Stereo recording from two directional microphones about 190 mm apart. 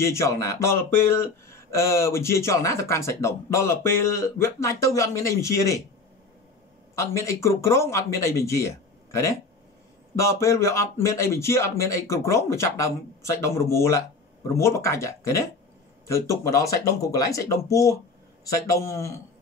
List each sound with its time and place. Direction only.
0.0 s speech: 15° left (ahead or behind)
7.0 s speech: 15° left (ahead or behind)